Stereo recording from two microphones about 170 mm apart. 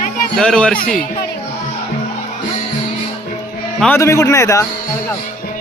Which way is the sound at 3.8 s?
15° left (ahead or behind).